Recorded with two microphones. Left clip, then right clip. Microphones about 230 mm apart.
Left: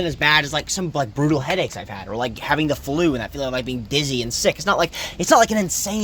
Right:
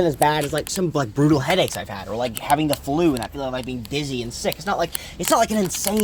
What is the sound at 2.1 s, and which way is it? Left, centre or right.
Speech, left.